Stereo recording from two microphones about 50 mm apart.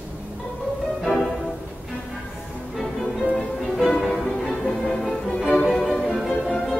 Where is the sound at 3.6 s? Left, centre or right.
Centre.